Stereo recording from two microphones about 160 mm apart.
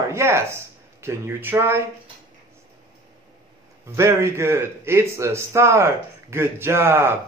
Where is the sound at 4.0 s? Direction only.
15° right (ahead or behind).